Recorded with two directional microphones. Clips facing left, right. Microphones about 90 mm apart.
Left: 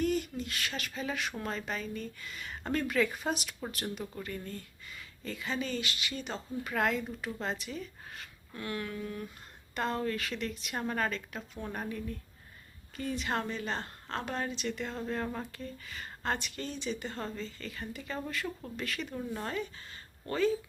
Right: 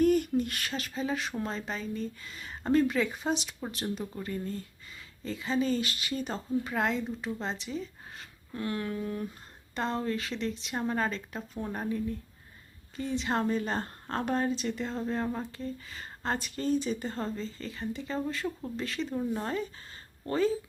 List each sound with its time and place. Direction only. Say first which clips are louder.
0.0 s a sound: right 7 dB; 50° right (ahead or behind)
0.7 s a woman's voice: right 4 dB; 35° right (ahead or behind)
6.7 s a woman's voice: left 4 dB; 25° right (ahead or behind)
19.1 s speech: right 5 dB; 20° right (ahead or behind)
19.5 s speech: right 3 dB; 35° right (ahead or behind)